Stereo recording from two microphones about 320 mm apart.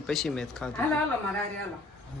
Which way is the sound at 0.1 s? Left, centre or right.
Centre.